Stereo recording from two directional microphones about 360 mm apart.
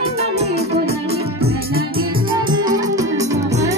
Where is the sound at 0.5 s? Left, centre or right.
Right.